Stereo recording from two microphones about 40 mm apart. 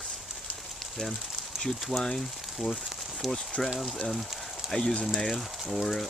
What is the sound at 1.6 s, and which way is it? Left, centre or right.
Speech, centre.